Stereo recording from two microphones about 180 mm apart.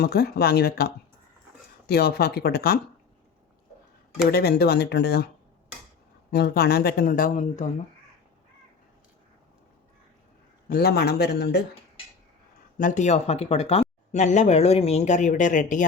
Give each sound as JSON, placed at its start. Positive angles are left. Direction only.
{"t": 0.0, "sound": "speech", "side_deg": 60}
{"t": 4.3, "sound": "speech", "side_deg": 60}
{"t": 6.3, "sound": "speech", "side_deg": 65}
{"t": 10.7, "sound": "speech", "side_deg": 60}
{"t": 12.7, "sound": "speech", "side_deg": 45}